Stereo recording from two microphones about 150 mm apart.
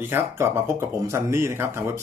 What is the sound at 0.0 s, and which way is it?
Speech, 15° right (ahead or behind).